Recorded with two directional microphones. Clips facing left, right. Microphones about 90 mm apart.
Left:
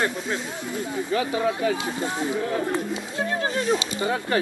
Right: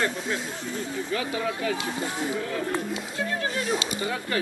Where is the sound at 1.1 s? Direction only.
30° left (ahead or behind).